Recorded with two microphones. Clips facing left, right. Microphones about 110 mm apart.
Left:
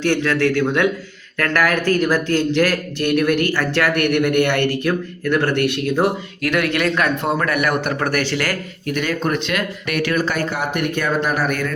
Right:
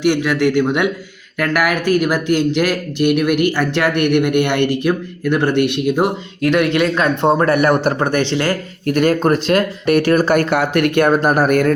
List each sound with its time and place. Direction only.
0.0 s speech: 15° right (ahead or behind)
8.9 s speech: 45° right (ahead or behind)
10.5 s speech: 90° right
11.0 s speech: 45° right (ahead or behind)